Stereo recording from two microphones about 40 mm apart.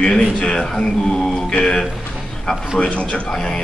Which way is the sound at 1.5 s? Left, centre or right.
Left.